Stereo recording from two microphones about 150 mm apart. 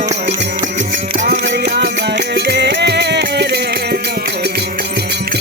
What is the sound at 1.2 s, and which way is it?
Music, 80° right.